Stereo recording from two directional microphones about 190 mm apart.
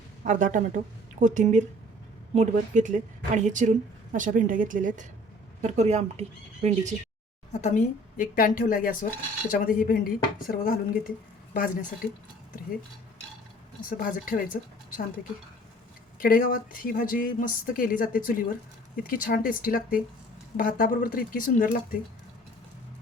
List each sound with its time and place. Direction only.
0.3 s a woman's voice: 40° right (ahead or behind)
7.5 s speech: 40° left (ahead or behind)
13.9 s speech: 45° left (ahead or behind)